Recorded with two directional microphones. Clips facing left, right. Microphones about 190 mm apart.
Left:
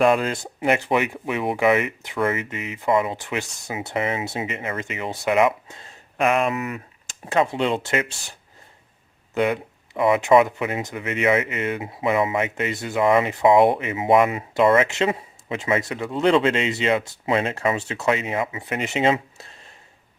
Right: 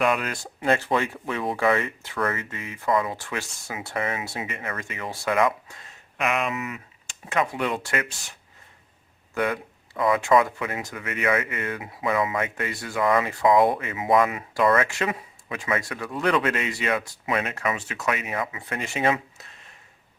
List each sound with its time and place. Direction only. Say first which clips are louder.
0.0 s speech: left 6 dB; 30° left (ahead or behind)
6.5 s speech: left 4 dB; 50° left (ahead or behind); by 19.5 s 25° left (ahead or behind)